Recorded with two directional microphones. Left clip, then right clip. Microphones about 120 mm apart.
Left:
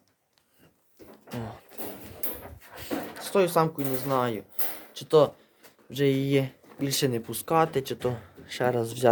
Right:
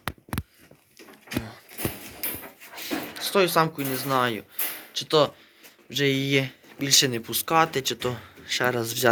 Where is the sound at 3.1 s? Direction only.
15° left (ahead or behind).